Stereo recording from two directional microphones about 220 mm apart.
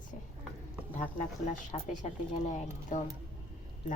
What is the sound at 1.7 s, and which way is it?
Speech, 30° left (ahead or behind).